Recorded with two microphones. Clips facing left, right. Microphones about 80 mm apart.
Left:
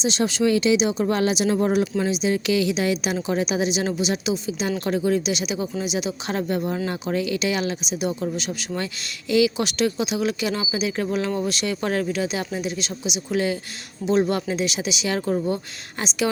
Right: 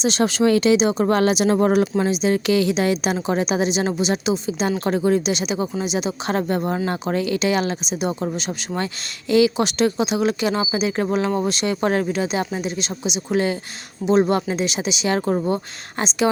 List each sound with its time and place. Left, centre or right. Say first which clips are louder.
0.0 s speech: right 3 dB; right
2.0 s a woman's voice: right 3 dB; right